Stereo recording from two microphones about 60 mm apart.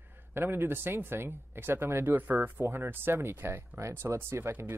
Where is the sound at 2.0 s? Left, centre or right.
Right.